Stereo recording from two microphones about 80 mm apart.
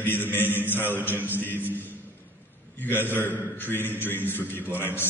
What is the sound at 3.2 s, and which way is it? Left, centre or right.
A man's voice, left.